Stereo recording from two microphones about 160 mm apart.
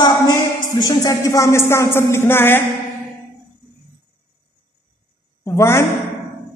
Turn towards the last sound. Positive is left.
turn(degrees=20)  # may be behind; listen again after turning